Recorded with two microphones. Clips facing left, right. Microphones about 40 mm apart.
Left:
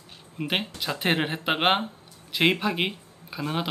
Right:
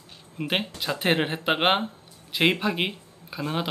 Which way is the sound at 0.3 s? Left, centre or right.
Centre.